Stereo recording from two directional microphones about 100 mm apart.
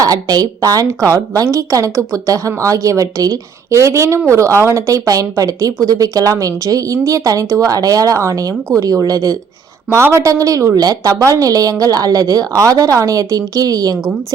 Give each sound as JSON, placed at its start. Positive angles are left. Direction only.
{"t": 0.0, "sound": "a woman's voice", "side_deg": -40}